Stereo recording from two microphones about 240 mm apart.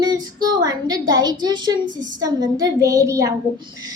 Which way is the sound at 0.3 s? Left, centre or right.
Centre.